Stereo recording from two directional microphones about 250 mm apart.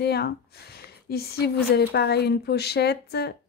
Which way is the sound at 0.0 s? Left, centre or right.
Left.